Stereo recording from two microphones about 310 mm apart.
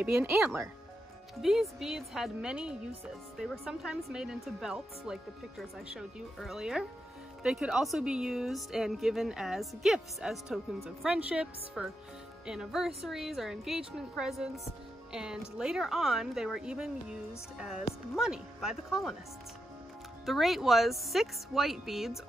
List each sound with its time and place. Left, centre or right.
0.0 s a woman's voice: centre
20.2 s a woman's voice: centre